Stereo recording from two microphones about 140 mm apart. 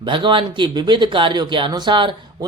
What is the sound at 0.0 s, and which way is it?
Speech, 35° right (ahead or behind).